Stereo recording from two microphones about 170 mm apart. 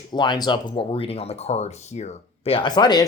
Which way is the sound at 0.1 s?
25° left (ahead or behind).